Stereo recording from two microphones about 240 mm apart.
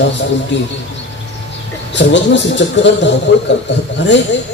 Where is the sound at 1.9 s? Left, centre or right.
Left.